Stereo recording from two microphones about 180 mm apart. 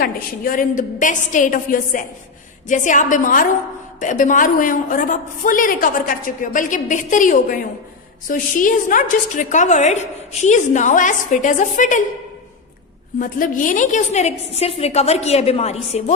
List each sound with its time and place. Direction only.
0.0 s a woman's voice: 50° left (ahead or behind)
13.1 s a woman's voice: 50° left (ahead or behind)